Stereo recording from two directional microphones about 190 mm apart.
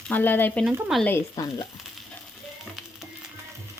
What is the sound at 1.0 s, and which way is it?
Speech, 10° left (ahead or behind).